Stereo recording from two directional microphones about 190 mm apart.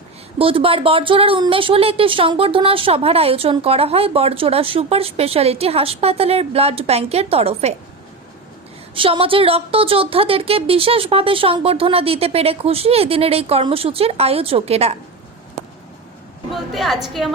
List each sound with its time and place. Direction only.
0.3 s a woman's voice: 30° right (ahead or behind)
9.0 s a woman's voice: 30° right (ahead or behind)
16.7 s a woman's voice: centre (ahead or behind)